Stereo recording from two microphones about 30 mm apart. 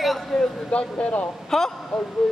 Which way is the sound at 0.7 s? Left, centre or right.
Left.